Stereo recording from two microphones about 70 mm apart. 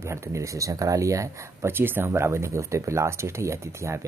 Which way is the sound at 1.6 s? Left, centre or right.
Right.